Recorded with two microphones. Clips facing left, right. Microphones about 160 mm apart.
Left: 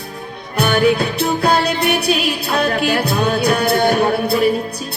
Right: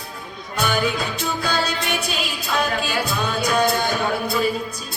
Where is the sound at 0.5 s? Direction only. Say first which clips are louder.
Left 8 dB; 65° left (ahead or behind).